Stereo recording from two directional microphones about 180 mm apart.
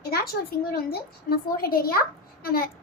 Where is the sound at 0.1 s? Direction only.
60° left (ahead or behind).